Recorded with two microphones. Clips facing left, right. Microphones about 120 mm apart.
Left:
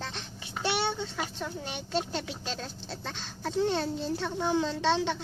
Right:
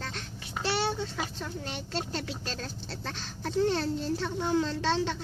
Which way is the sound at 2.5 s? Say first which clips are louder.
Even; centre (ahead or behind).